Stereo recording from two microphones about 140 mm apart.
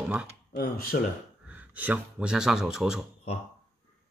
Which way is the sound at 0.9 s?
90° left.